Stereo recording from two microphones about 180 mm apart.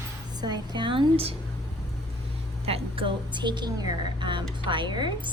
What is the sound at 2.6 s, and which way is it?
A woman's voice, 30° right (ahead or behind).